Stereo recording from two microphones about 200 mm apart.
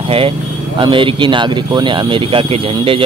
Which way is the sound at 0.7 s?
25° right (ahead or behind).